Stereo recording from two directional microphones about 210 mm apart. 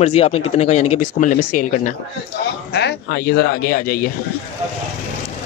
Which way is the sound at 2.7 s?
50° left (ahead or behind).